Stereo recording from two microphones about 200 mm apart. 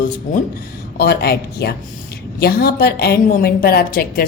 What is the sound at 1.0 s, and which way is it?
A woman's voice, 55° left (ahead or behind).